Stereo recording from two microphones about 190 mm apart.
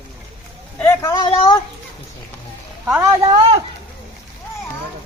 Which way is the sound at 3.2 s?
30° right (ahead or behind).